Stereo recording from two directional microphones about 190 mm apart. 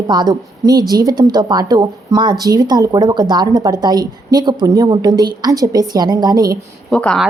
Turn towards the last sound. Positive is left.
turn(degrees=5)  # may be behind; listen again after turning